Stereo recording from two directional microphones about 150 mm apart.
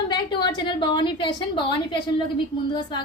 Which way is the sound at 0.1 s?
30° left (ahead or behind).